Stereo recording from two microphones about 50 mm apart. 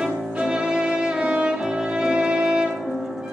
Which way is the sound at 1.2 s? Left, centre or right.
Right.